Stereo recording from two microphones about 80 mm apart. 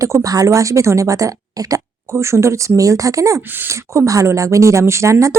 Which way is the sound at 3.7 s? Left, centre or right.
Right.